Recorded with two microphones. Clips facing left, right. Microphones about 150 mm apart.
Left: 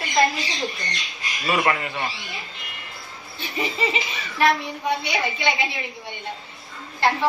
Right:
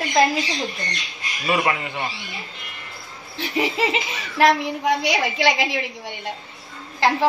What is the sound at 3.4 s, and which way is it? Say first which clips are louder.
A woman's voice: right 4 dB; 90° right.